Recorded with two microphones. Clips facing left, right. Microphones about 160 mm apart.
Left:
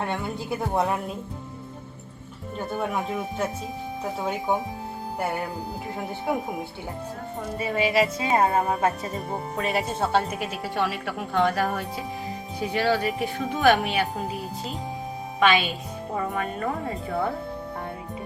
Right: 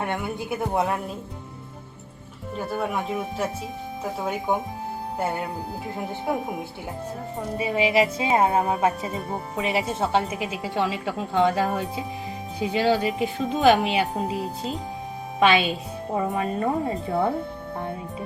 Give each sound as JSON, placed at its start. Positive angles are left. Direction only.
{"t": 0.0, "sound": "speech", "side_deg": -15}
{"t": 0.8, "sound": "speech", "side_deg": 0}
{"t": 2.6, "sound": "speech", "side_deg": 0}
{"t": 5.2, "sound": "speech", "side_deg": -20}
{"t": 7.6, "sound": "speech", "side_deg": -15}
{"t": 9.6, "sound": "speech", "side_deg": -15}
{"t": 16.1, "sound": "speech", "side_deg": -25}